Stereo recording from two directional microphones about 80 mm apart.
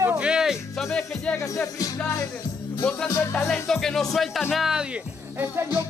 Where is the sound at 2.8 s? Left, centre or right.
Left.